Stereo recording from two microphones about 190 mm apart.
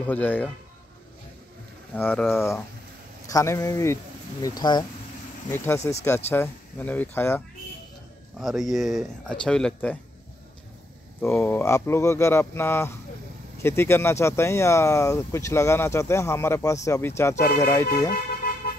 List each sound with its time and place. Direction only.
0.0 s speech: 10° left (ahead or behind)
2.0 s speech: 10° left (ahead or behind)
5.9 s speech: 15° left (ahead or behind)
8.4 s speech: centre (ahead or behind)
11.2 s speech: 10° left (ahead or behind)